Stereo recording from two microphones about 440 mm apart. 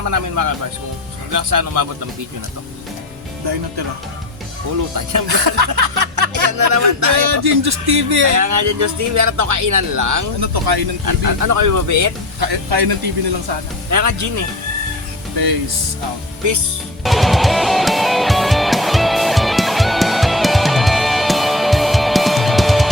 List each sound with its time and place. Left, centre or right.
0.0 s speech: right
4.9 s speech: right
7.3 s speech: right
8.3 s speech: right
10.4 s speech: right
11.0 s speech: right
12.4 s speech: right
13.9 s speech: right
17.0 s music: centre